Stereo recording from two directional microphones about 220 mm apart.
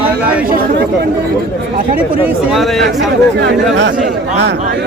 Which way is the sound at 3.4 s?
50° right (ahead or behind).